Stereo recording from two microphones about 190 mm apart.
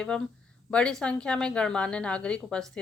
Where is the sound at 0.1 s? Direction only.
5° left (ahead or behind).